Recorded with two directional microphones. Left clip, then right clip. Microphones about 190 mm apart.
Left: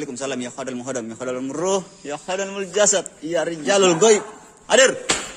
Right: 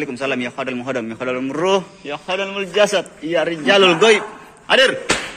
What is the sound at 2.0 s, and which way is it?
A man's voice, 35° left (ahead or behind).